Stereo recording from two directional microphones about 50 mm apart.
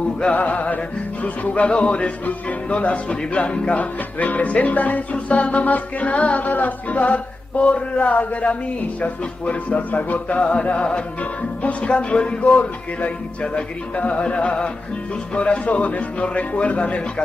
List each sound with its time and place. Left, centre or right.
0.2 s speech: left